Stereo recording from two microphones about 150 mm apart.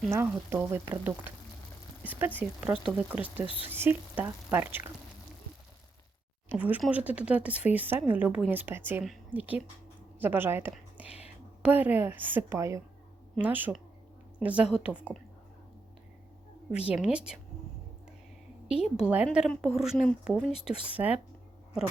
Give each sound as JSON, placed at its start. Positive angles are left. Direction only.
{"t": 0.3, "sound": "speech", "side_deg": -15}
{"t": 3.4, "sound": "speech", "side_deg": 35}
{"t": 3.7, "sound": "speech", "side_deg": -15}
{"t": 6.5, "sound": "a woman's voice", "side_deg": -10}
{"t": 16.7, "sound": "speech", "side_deg": -5}
{"t": 18.9, "sound": "a woman's voice", "side_deg": -10}